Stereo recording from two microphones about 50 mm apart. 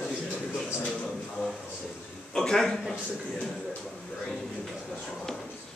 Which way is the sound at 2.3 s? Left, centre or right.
Centre.